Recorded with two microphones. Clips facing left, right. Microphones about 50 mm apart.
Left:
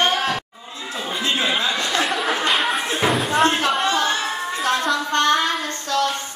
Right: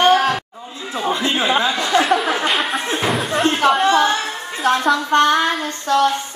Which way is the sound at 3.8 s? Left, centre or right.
Right.